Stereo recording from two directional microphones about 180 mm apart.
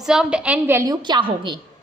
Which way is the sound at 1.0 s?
25° right (ahead or behind).